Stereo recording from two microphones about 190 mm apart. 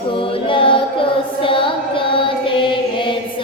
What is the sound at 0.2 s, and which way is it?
Child singing, 25° left (ahead or behind).